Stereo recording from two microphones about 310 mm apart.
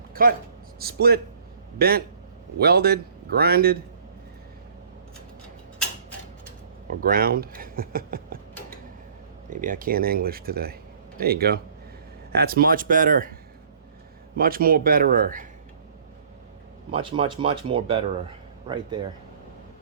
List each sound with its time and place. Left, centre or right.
0.1 s a sound: right
0.8 s speech: right
6.8 s speech: right
9.5 s speech: right
14.3 s speech: right
16.9 s speech: centre